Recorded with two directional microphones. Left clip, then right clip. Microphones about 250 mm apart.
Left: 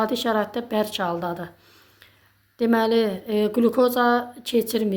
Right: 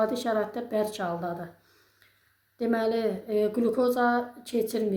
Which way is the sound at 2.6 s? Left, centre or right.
Left.